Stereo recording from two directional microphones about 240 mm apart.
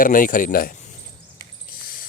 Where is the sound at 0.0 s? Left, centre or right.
Left.